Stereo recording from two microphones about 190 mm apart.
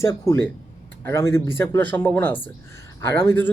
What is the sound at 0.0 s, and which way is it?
Speech, 15° left (ahead or behind).